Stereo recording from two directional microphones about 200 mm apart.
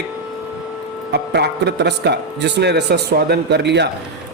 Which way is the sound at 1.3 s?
55° right (ahead or behind).